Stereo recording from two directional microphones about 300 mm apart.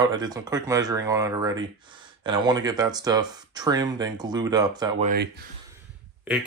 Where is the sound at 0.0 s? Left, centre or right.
Centre.